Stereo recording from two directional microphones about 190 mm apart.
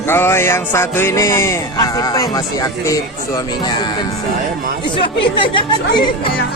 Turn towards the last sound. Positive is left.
turn(degrees=25)  # may be behind; listen again after turning